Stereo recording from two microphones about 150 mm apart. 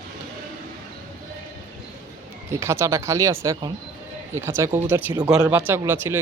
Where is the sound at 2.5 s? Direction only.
20° right (ahead or behind).